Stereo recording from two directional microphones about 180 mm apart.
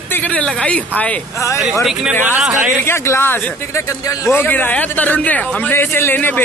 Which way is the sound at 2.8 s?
15° left (ahead or behind).